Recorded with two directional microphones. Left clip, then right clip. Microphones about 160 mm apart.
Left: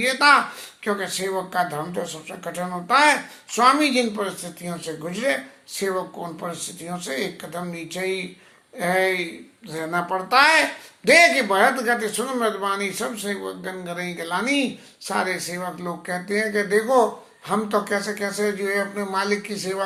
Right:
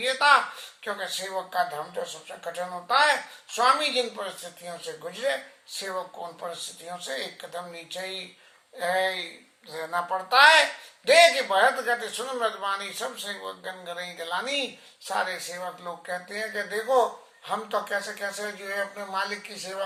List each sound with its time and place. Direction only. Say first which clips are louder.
0.0 s speech: left 4 dB; 15° left (ahead or behind)
6.4 s speech: left 4 dB; 15° left (ahead or behind)